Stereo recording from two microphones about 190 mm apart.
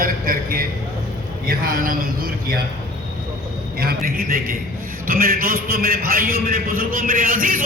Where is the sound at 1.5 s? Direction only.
50° right (ahead or behind).